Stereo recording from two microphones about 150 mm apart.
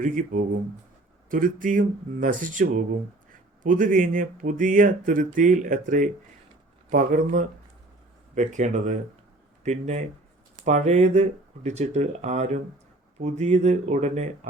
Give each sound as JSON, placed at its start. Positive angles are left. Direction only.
{"t": 0.0, "sound": "speech", "side_deg": -60}